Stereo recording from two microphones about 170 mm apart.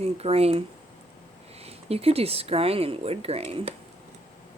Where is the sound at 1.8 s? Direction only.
35° right (ahead or behind).